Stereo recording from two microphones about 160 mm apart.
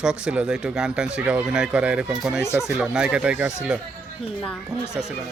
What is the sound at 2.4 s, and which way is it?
Speech, 15° left (ahead or behind).